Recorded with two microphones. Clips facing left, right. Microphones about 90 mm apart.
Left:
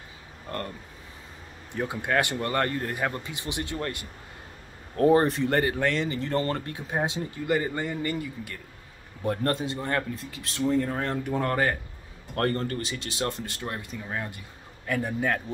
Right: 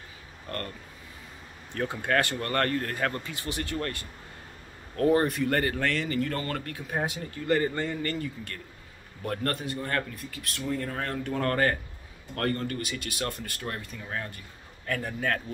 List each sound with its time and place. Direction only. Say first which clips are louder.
0.5 s speech: left 2 dB; 15° left (ahead or behind)
1.7 s speech: even; 15° left (ahead or behind)
9.2 s speech: left 4 dB; 25° left (ahead or behind)
12.4 s speech: left 3 dB; 35° left (ahead or behind); by 15.4 s 15° left (ahead or behind)